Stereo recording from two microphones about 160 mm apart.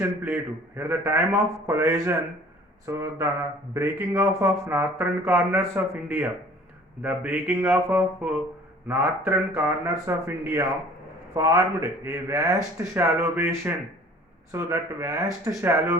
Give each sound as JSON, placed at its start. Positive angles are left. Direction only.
{"t": 0.0, "sound": "a man's voice", "side_deg": -10}